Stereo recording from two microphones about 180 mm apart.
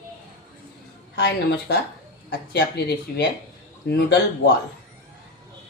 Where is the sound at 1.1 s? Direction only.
70° left (ahead or behind).